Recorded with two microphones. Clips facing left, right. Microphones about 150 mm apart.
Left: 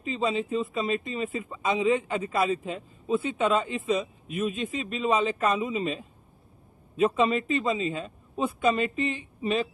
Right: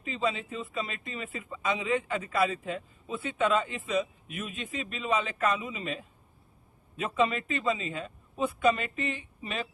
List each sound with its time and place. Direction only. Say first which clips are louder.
0.0 s speech: left 4 dB; 30° left (ahead or behind)